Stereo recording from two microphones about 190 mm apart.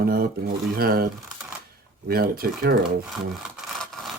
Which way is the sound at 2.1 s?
50° right (ahead or behind).